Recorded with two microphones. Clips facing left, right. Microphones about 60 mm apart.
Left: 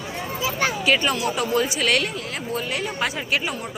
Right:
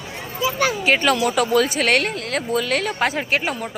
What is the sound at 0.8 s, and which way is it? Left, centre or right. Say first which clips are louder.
Speech: even; right.